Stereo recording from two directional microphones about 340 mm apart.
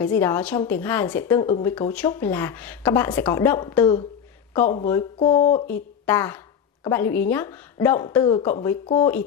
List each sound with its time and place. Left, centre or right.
0.0 s a woman's voice: centre